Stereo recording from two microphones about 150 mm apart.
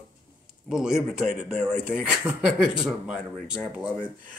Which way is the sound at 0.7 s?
5° right (ahead or behind).